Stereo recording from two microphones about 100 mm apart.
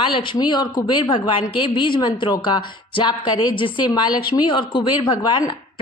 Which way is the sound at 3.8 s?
45° left (ahead or behind).